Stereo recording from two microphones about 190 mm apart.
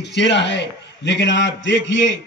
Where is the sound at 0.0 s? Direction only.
70° left (ahead or behind).